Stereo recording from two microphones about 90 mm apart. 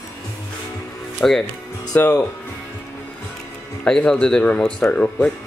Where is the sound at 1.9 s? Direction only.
20° left (ahead or behind).